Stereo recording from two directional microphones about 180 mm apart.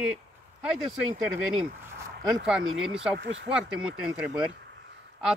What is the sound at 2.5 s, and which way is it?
Speech, 5° right (ahead or behind).